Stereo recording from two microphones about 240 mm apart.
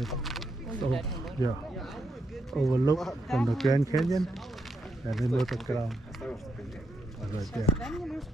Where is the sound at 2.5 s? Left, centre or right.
Centre.